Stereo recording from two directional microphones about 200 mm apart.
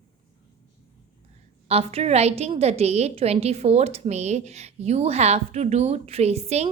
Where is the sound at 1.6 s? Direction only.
30° right (ahead or behind).